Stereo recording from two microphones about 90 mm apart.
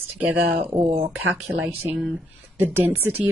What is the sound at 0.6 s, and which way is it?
Speech, 90° right.